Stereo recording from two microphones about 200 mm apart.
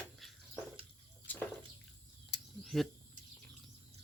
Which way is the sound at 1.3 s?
10° left (ahead or behind).